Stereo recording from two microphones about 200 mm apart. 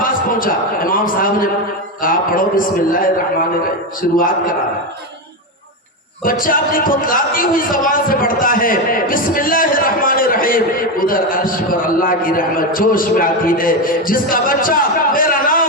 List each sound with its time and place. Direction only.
0.0 s a sound: 45° left (ahead or behind)
2.0 s a man's voice: 45° left (ahead or behind)
6.4 s a man's voice: 45° left (ahead or behind)